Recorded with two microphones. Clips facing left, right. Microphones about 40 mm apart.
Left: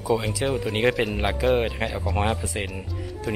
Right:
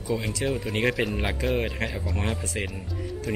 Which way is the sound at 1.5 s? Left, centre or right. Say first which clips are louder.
Left 4 dB; centre.